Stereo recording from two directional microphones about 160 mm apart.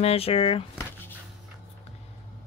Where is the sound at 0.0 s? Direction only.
40° left (ahead or behind).